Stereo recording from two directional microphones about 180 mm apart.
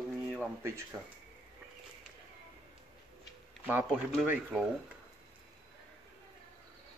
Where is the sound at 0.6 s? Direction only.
15° right (ahead or behind).